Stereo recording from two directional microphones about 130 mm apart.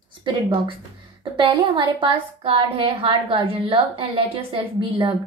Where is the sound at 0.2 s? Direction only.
40° right (ahead or behind).